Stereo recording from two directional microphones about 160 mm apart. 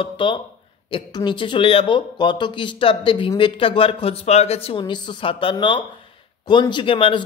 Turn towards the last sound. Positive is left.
turn(degrees=35)  # may be behind; listen again after turning